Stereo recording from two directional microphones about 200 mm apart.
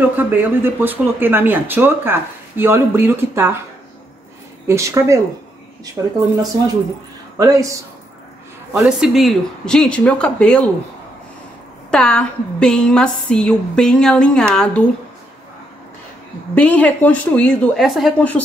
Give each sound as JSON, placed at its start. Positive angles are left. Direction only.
{"t": 0.2, "sound": "speech", "side_deg": -10}
{"t": 4.6, "sound": "speech", "side_deg": -15}
{"t": 7.3, "sound": "speech", "side_deg": -15}
{"t": 8.7, "sound": "a woman's voice", "side_deg": 0}
{"t": 11.9, "sound": "a woman's voice", "side_deg": 5}
{"t": 16.5, "sound": "a woman's voice", "side_deg": 5}